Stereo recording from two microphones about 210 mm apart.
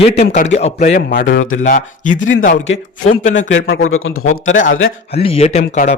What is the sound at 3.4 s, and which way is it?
A man's voice, 55° left (ahead or behind).